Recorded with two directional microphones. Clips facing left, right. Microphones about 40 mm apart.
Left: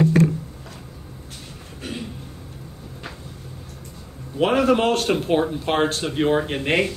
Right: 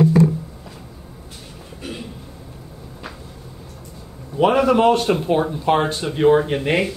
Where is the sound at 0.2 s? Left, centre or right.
Left.